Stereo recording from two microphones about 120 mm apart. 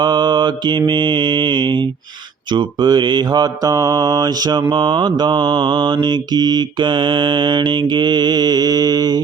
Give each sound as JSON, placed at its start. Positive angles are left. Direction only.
{"t": 0.0, "sound": "mantra", "side_deg": -40}